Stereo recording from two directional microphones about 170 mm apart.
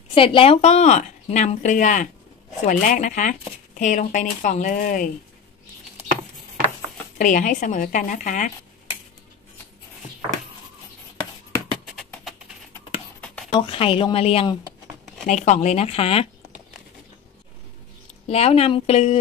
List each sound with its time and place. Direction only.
0.1 s a woman's voice: 30° left (ahead or behind); by 5.1 s 55° left (ahead or behind)
7.2 s a woman's voice: 50° left (ahead or behind)
12.0 s music: centre (ahead or behind)
13.5 s speech: 30° left (ahead or behind)
15.2 s speech: 45° left (ahead or behind)
18.3 s speech: 40° left (ahead or behind)